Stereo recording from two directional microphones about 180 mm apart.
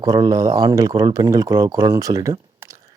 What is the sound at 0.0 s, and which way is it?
Speech, 20° right (ahead or behind).